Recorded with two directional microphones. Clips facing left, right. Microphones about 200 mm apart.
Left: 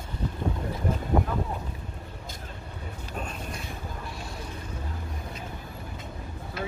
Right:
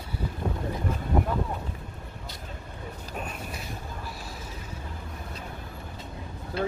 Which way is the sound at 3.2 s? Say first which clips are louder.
Left 1 dB; 5° right (ahead or behind).